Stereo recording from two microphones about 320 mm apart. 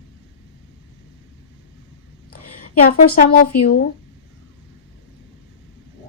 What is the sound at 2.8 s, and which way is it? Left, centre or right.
Speech, left.